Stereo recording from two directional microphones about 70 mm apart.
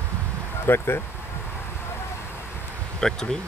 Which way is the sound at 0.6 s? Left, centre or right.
Left.